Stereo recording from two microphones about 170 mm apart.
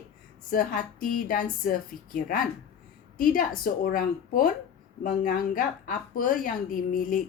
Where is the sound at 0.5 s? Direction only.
55° left (ahead or behind).